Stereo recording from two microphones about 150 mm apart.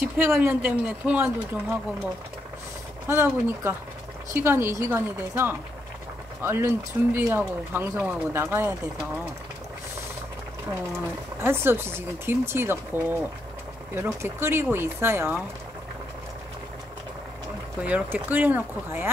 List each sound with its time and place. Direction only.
0.0 s speech: 15° right (ahead or behind)
3.1 s speech: 15° right (ahead or behind)
11.4 s speech: 15° right (ahead or behind)
17.8 s speech: 10° right (ahead or behind)